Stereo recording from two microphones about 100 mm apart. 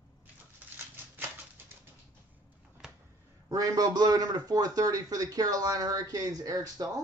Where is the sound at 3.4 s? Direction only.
35° right (ahead or behind).